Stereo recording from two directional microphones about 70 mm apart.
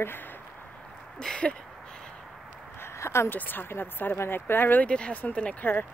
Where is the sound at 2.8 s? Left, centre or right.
Left.